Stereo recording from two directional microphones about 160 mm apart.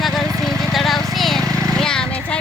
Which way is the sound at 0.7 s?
Centre (ahead or behind).